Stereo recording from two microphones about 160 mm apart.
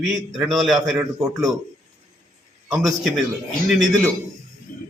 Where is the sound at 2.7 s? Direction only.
Centre (ahead or behind).